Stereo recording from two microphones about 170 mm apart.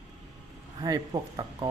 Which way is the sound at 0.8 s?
20° right (ahead or behind).